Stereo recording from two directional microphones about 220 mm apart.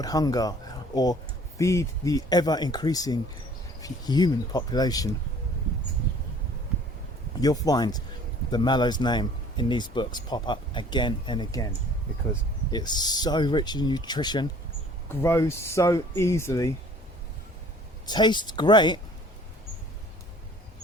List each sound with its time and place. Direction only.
0.0 s speech: 15° left (ahead or behind)
1.5 s speech: 15° left (ahead or behind)
7.4 s speech: 15° left (ahead or behind)
12.7 s speech: 20° left (ahead or behind)
18.0 s speech: 20° left (ahead or behind)